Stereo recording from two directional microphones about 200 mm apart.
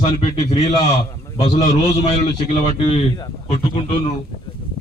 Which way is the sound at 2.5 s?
30° left (ahead or behind).